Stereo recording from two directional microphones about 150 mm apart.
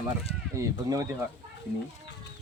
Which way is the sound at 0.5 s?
20° right (ahead or behind).